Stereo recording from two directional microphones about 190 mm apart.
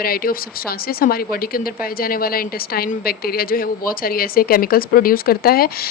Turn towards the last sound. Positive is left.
turn(degrees=55)  # may be behind; listen again after turning